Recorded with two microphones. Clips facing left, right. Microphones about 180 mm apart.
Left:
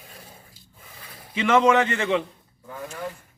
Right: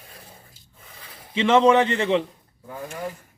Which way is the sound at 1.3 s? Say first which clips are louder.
Right 2 dB; 30° right (ahead or behind).